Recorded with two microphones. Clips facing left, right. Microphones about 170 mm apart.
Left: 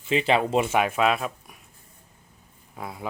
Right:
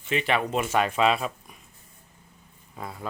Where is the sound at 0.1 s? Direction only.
25° left (ahead or behind).